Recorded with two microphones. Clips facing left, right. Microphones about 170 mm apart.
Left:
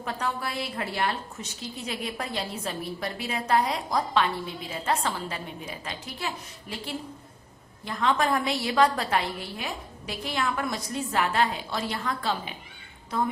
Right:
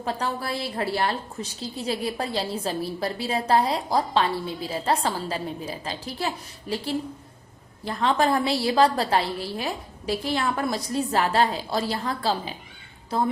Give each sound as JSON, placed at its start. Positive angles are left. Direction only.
{"t": 0.0, "sound": "a woman's voice", "side_deg": -30}